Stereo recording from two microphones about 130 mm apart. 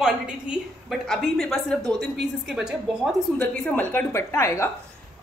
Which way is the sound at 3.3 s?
10° left (ahead or behind).